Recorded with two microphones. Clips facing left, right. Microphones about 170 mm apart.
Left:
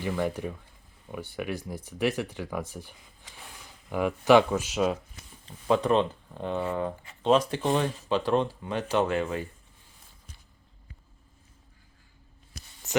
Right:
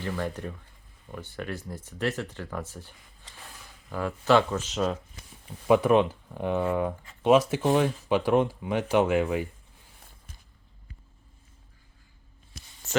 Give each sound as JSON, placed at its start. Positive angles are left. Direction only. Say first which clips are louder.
{"t": 0.0, "sound": "speech", "louder": "left 3 dB", "side_deg": 10}
{"t": 5.5, "sound": "speech", "louder": "right 3 dB", "side_deg": -10}
{"t": 12.9, "sound": "music", "louder": "even", "side_deg": 20}